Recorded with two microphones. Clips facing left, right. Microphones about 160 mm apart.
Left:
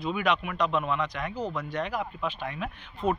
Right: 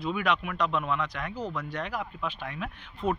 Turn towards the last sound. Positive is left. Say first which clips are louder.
# left 2 dB
turn(degrees=35)  # may be behind; listen again after turning